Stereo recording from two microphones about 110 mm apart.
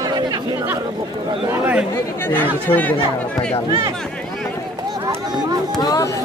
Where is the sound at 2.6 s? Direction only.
15° left (ahead or behind).